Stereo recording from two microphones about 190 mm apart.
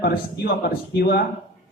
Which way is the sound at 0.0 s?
60° left (ahead or behind).